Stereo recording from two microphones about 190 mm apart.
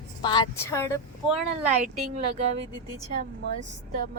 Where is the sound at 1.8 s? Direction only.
40° right (ahead or behind).